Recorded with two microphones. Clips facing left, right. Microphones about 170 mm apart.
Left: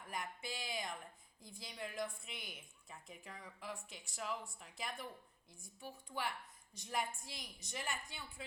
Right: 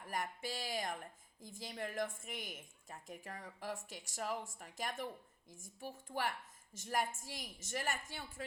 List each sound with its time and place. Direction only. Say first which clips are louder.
0.1 s a woman's voice: right 4 dB; 45° right (ahead or behind)